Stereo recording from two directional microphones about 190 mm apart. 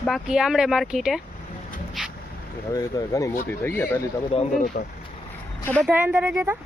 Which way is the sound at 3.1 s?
15° left (ahead or behind).